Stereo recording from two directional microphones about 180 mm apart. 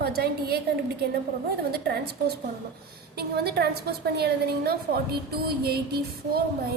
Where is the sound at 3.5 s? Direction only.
65° right (ahead or behind).